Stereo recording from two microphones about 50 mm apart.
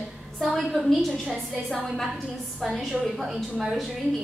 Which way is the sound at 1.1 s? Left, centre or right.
Centre.